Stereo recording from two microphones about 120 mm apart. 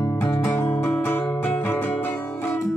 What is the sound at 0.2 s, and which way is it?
Music, 20° left (ahead or behind).